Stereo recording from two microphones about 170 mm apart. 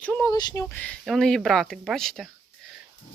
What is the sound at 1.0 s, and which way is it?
Speech, centre (ahead or behind).